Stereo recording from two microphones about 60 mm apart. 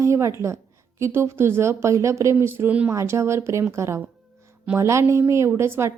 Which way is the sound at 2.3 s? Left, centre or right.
Right.